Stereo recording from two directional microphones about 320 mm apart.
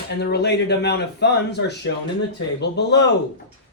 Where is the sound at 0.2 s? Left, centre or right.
Left.